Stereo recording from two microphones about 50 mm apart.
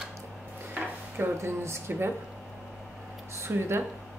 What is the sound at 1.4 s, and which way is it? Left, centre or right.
Speech, right.